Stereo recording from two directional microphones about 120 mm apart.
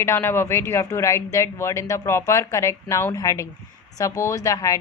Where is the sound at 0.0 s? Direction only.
20° left (ahead or behind).